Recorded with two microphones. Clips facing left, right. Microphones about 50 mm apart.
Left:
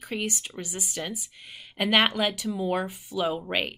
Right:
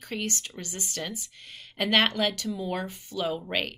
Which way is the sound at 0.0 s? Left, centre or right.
Centre.